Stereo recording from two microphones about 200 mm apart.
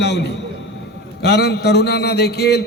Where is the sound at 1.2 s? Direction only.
55° left (ahead or behind).